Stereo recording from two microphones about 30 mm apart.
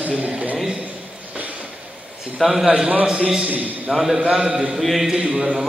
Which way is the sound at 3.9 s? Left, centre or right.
Centre.